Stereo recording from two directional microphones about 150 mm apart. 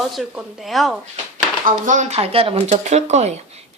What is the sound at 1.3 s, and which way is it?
Speech, 55° right (ahead or behind).